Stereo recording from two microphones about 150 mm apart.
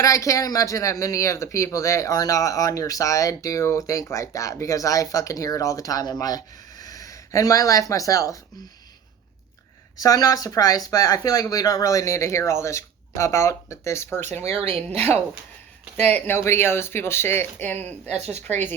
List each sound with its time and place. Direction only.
0.0 s speech: 20° left (ahead or behind)
10.0 s speech: 25° left (ahead or behind)
14.4 s speech: 40° right (ahead or behind)
14.8 s speech: 10° left (ahead or behind)
18.1 s speech: 45° right (ahead or behind)
18.4 s speech: 10° left (ahead or behind)